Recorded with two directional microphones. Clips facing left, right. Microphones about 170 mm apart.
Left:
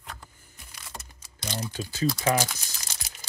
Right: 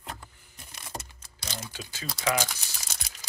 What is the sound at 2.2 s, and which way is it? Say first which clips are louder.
Speech: even; 35° left (ahead or behind).